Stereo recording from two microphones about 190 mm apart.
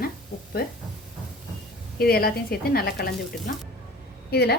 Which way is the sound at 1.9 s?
55° left (ahead or behind).